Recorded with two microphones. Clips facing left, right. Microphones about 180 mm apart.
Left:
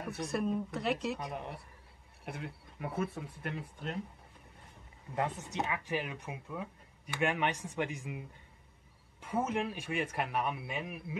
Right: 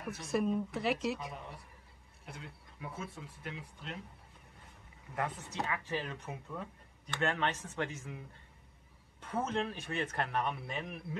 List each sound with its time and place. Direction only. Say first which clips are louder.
0.2 s speech: right 1 dB; centre (ahead or behind)
2.2 s speech: left 7 dB; 60° left (ahead or behind)
5.1 s speech: left 3 dB; 25° left (ahead or behind)
9.2 s speech: left 2 dB; 10° left (ahead or behind)